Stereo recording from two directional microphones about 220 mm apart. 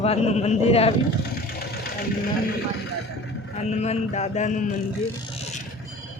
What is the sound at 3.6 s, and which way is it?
Speech, 30° left (ahead or behind).